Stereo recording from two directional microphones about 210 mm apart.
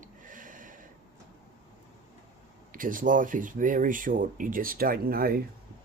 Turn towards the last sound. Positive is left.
turn(degrees=-45)  # may be behind; listen again after turning